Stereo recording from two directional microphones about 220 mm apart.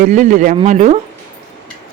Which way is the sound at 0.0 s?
35° right (ahead or behind).